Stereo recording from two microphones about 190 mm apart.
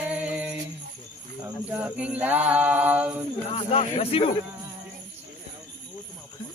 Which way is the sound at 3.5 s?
35° left (ahead or behind).